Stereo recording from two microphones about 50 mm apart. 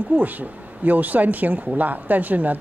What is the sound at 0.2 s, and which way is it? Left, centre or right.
Speech, right.